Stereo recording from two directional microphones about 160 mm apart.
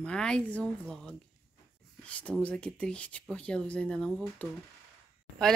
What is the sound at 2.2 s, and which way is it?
A woman's voice, 10° left (ahead or behind).